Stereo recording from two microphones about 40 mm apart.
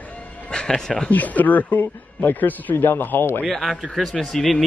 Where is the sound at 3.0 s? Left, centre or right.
Left.